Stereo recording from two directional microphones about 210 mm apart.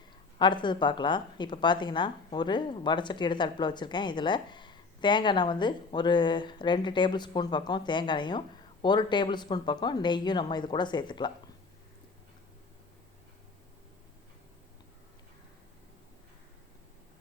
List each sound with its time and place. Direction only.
0.3 s a woman's voice: 20° left (ahead or behind)